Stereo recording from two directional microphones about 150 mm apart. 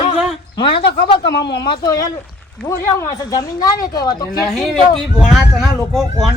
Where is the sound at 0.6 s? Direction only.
35° left (ahead or behind).